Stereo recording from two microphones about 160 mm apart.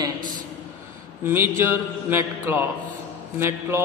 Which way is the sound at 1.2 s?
15° right (ahead or behind).